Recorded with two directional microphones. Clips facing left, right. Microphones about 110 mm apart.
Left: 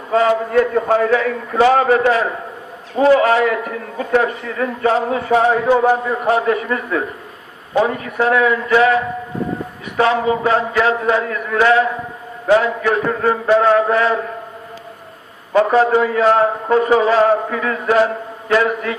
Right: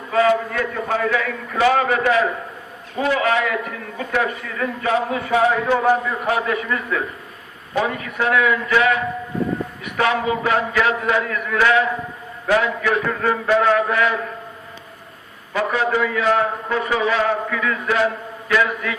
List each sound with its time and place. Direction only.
0.1 s a man's voice: 30° left (ahead or behind)
10.0 s a man's voice: 30° left (ahead or behind)
15.5 s a man's voice: 35° left (ahead or behind)